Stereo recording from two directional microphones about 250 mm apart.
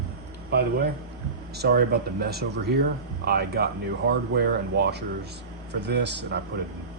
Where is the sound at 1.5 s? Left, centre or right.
Right.